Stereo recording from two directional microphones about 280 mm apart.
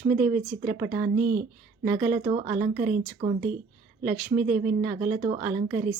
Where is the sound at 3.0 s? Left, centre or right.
Centre.